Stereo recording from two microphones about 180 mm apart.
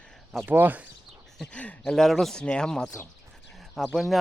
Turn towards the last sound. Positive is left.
turn(degrees=0)  # may be behind; listen again after turning